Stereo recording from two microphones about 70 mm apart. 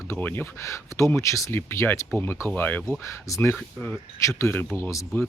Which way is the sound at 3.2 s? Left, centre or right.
Left.